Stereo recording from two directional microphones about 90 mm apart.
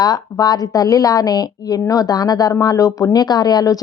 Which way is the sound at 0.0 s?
50° left (ahead or behind).